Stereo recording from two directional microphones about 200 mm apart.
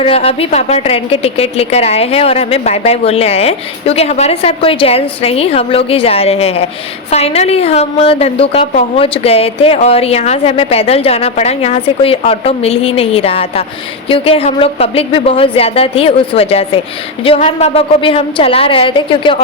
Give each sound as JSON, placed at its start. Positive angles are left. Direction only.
{"t": 0.0, "sound": "a woman's voice", "side_deg": 30}